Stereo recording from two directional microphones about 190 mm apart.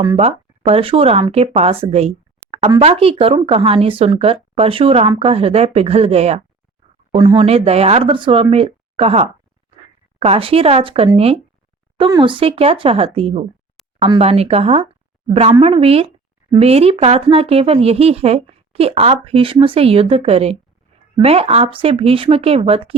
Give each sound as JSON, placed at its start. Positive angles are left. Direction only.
{"t": 0.0, "sound": "speech", "side_deg": -25}